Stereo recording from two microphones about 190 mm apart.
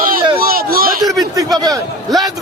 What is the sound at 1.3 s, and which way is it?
Speech, 20° right (ahead or behind).